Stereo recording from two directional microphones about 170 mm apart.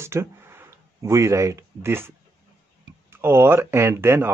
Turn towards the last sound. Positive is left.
turn(degrees=-15)  # may be behind; listen again after turning